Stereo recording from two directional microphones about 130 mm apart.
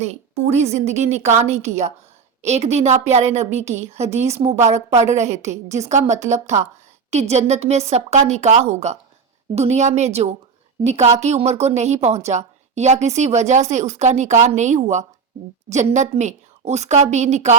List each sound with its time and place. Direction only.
0.0 s a woman's voice: 55° right (ahead or behind)